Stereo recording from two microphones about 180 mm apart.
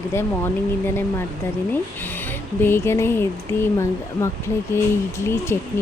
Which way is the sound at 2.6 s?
15° left (ahead or behind).